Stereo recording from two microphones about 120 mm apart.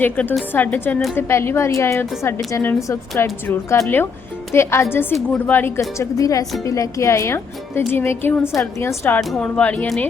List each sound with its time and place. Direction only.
0.0 s speech: 15° left (ahead or behind)